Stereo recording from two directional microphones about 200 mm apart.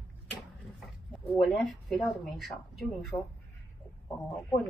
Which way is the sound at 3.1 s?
20° left (ahead or behind).